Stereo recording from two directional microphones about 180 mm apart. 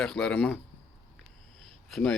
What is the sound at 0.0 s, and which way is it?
Speech, 5° left (ahead or behind).